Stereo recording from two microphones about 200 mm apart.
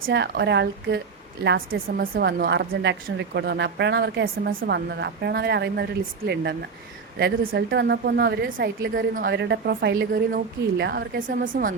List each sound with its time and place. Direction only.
0.0 s a woman's voice: 60° right (ahead or behind)
1.7 s a woman's voice: 45° right (ahead or behind)
9.0 s a woman's voice: 45° right (ahead or behind)